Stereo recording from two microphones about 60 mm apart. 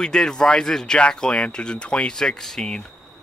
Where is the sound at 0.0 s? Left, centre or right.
Centre.